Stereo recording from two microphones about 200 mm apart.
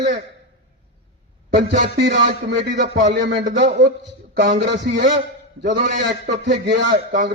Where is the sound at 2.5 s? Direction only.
55° right (ahead or behind).